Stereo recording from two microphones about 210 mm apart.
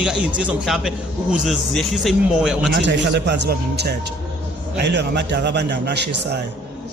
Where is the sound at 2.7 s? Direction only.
55° right (ahead or behind).